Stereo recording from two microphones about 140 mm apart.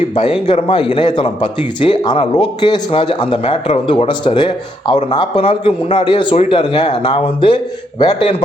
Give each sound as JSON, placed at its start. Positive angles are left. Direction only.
{"t": 0.2, "sound": "speech", "side_deg": 40}